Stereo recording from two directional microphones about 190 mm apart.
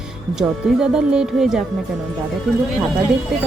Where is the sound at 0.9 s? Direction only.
5° right (ahead or behind).